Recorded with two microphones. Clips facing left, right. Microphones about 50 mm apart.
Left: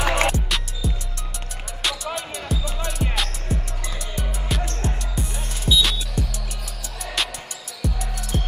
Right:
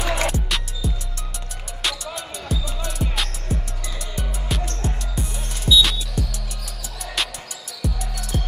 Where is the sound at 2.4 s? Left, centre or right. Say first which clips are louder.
Left 1 dB; centre.